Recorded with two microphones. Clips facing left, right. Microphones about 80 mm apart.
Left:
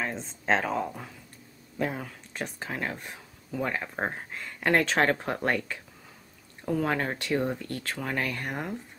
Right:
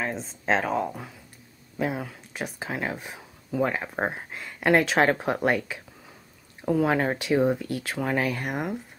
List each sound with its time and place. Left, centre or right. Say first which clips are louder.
0.0 s speech: right 2 dB; centre